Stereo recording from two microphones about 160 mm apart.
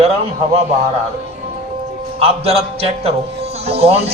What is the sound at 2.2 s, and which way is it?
A woman's voice, 40° right (ahead or behind).